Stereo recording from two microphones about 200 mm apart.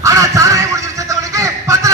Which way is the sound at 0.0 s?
15° right (ahead or behind).